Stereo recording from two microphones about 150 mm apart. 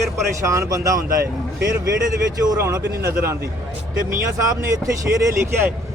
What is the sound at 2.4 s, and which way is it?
Speech, 20° right (ahead or behind).